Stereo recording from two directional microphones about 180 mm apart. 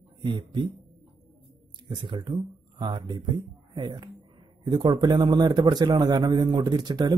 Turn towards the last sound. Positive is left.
turn(degrees=-25)  # may be behind; listen again after turning